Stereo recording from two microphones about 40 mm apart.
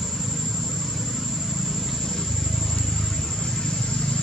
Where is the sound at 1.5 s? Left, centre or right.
Centre.